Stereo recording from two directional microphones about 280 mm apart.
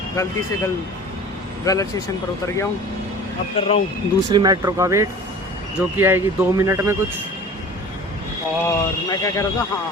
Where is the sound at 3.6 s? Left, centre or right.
Left.